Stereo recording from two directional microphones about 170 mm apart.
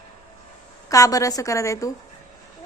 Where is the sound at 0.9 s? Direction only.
20° left (ahead or behind).